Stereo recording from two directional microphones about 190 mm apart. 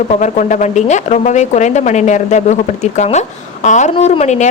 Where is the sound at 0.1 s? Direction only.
40° left (ahead or behind).